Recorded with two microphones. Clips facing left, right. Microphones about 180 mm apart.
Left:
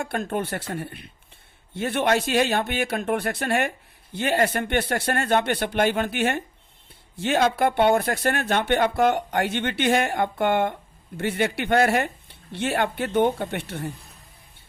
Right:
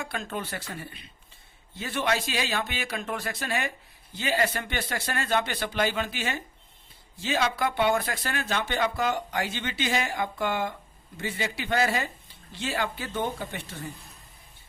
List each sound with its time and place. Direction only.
0.0 s speech: 55° left (ahead or behind)